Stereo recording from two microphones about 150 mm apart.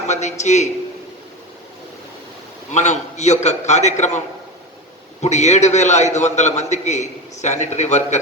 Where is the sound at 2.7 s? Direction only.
50° left (ahead or behind).